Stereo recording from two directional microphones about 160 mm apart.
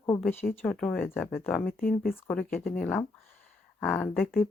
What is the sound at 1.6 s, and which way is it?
Speech, 65° left (ahead or behind).